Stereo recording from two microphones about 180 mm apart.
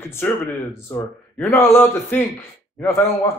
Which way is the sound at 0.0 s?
15° left (ahead or behind).